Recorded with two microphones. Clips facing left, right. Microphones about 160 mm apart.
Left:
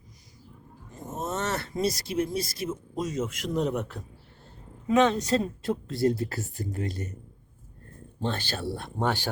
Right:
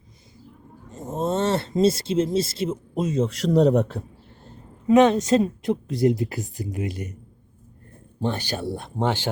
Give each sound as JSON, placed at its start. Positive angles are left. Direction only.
{"t": 0.9, "sound": "speech", "side_deg": -30}
{"t": 4.9, "sound": "speech", "side_deg": -15}
{"t": 8.2, "sound": "speech", "side_deg": -15}